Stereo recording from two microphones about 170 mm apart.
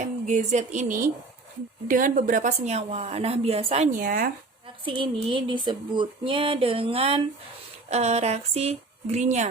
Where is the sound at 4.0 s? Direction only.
55° right (ahead or behind).